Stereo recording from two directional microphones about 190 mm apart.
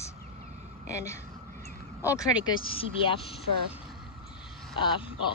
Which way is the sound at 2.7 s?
30° left (ahead or behind).